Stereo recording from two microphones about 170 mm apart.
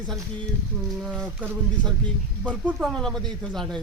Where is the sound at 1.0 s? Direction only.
Centre (ahead or behind).